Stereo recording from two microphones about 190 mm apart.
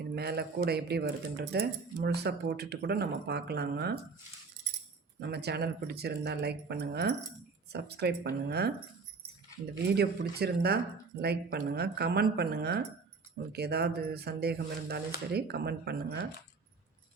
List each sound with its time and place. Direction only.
0.0 s speech: 55° right (ahead or behind)
5.2 s speech: 60° right (ahead or behind)
9.9 s speech: 55° right (ahead or behind)